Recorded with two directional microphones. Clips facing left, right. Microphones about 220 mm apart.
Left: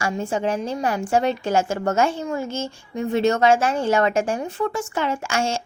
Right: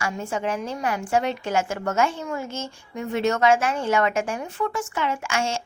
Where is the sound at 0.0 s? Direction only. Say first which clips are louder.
Left 4 dB; 30° left (ahead or behind).